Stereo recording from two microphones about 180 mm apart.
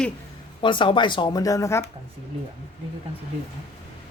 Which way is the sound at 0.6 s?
25° left (ahead or behind).